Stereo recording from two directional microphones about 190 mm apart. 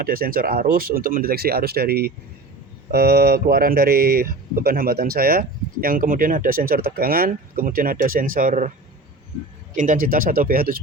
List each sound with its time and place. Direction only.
0.0 s speech: 50° right (ahead or behind)
9.7 s speech: 45° right (ahead or behind)